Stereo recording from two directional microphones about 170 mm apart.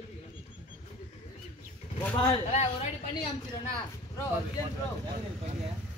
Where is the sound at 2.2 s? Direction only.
35° left (ahead or behind).